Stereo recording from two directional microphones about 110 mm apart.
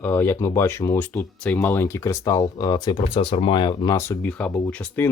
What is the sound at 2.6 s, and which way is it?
Speech, 40° left (ahead or behind).